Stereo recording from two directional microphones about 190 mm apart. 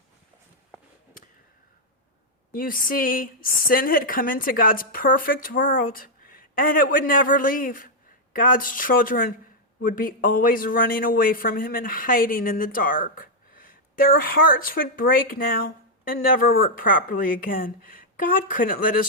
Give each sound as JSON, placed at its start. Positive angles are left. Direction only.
{"t": 2.5, "sound": "a man's voice", "side_deg": 50}